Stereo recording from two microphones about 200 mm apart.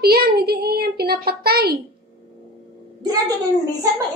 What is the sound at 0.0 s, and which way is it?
A woman's voice, 50° right (ahead or behind).